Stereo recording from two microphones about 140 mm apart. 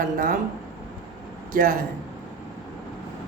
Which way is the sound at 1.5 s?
75° right (ahead or behind).